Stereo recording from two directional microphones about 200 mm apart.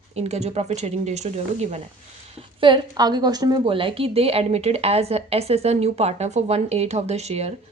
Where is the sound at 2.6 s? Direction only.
20° right (ahead or behind).